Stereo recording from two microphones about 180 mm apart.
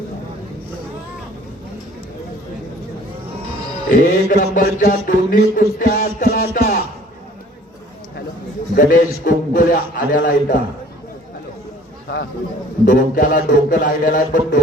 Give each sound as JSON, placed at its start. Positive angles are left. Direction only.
{"t": 3.8, "sound": "a sound", "side_deg": 50}
{"t": 8.7, "sound": "a man's voice", "side_deg": 50}
{"t": 12.0, "sound": "a man's voice", "side_deg": 65}
{"t": 12.8, "sound": "a man's voice", "side_deg": 50}